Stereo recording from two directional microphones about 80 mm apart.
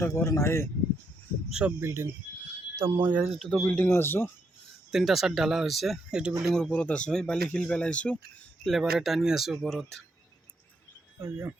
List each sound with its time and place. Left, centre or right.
0.0 s speech: left
1.5 s speech: centre
1.8 s speech: right
3.3 s speech: centre
3.8 s speech: left
4.9 s speech: centre
6.7 s speech: centre
8.6 s speech: centre
11.2 s speech: right